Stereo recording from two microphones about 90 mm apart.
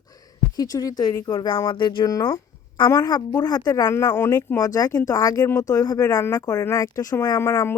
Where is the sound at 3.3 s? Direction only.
45° left (ahead or behind).